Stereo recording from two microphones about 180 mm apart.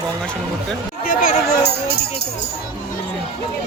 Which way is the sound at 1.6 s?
65° left (ahead or behind).